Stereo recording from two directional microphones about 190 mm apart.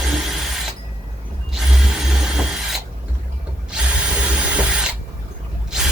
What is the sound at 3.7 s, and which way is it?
Drill, 5° right (ahead or behind).